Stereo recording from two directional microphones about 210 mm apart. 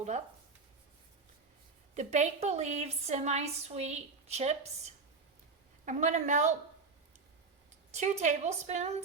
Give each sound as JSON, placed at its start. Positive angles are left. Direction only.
{"t": 2.0, "sound": "a woman's voice", "side_deg": -35}
{"t": 5.8, "sound": "a woman's voice", "side_deg": -35}
{"t": 7.9, "sound": "a woman's voice", "side_deg": -35}